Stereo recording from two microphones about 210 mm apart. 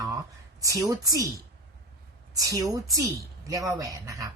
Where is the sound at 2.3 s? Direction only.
15° right (ahead or behind).